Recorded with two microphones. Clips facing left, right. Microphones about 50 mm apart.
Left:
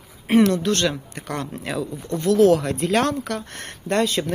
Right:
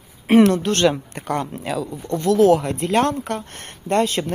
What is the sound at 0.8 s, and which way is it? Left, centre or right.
Speech, centre.